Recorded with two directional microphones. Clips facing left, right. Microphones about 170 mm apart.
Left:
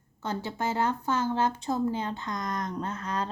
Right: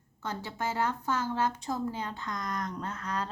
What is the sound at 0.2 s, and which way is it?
Speech, 25° left (ahead or behind).